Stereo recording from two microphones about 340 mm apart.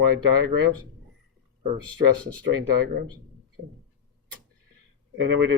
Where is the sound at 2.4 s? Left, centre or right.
Right.